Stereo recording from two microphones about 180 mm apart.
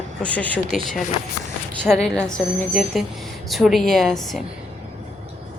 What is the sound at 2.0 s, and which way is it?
A woman's voice, 5° left (ahead or behind).